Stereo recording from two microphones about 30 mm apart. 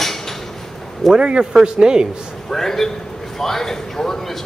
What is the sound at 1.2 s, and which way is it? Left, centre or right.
Speech, right.